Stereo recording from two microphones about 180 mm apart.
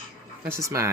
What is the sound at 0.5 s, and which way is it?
Speech, 15° right (ahead or behind).